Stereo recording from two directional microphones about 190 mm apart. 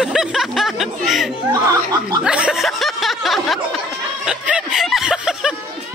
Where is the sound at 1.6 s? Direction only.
20° right (ahead or behind).